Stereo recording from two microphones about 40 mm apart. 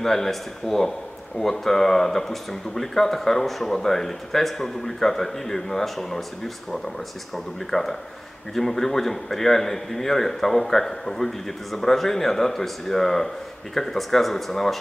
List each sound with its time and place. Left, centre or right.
0.0 s speech: centre
8.5 s speech: centre